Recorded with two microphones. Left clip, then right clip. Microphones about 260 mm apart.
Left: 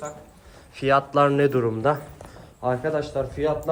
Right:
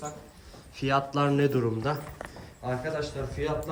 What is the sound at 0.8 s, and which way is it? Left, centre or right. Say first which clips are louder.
A man's voice: left 8 dB; centre.